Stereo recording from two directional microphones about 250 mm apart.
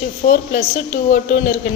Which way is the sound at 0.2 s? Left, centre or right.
Left.